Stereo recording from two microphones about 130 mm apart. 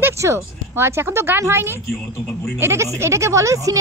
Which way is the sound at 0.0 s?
20° right (ahead or behind).